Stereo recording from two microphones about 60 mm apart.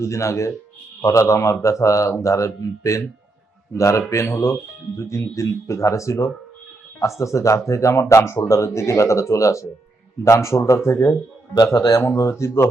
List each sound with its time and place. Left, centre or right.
0.0 s speech: left
11.5 s a man's voice: left
11.9 s speech: left